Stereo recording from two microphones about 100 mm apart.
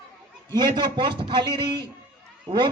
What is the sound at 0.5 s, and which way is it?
A man's voice, 50° right (ahead or behind).